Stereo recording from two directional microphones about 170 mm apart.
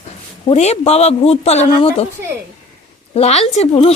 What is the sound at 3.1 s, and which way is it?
Speech, 40° left (ahead or behind).